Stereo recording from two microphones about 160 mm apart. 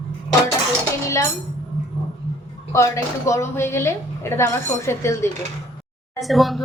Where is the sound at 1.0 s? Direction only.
20° left (ahead or behind).